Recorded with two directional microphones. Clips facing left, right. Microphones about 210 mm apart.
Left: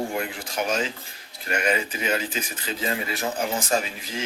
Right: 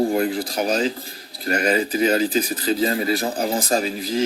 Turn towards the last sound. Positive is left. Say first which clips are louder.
# right 5 dB
turn(degrees=-35)  # may be behind; listen again after turning